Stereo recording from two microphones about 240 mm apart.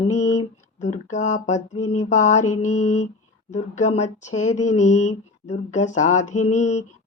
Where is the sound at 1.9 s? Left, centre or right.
Left.